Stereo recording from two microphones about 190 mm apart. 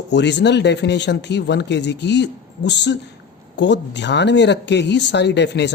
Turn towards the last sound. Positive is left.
turn(degrees=65)  # may be behind; listen again after turning